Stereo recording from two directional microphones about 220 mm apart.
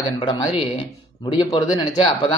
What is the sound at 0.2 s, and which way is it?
Speech, 25° left (ahead or behind).